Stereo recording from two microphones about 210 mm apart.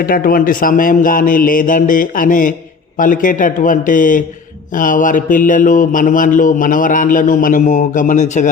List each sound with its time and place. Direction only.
0.0 s speech: 45° left (ahead or behind)